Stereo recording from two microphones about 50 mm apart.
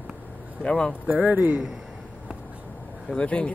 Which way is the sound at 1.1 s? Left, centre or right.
Right.